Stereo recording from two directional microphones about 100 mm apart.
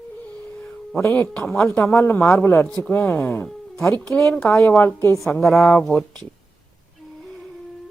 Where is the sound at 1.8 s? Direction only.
20° left (ahead or behind).